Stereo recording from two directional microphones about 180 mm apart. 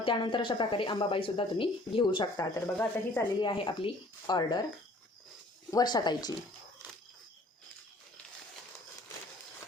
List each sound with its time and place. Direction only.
0.0 s speech: 25° left (ahead or behind); by 3.2 s 10° left (ahead or behind)
3.4 s speech: 25° left (ahead or behind)
5.7 s speech: 25° left (ahead or behind)